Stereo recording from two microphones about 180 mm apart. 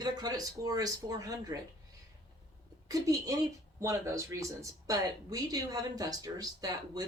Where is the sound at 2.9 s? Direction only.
20° right (ahead or behind).